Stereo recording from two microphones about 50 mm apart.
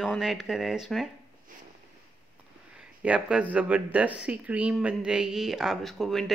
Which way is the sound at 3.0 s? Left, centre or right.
Right.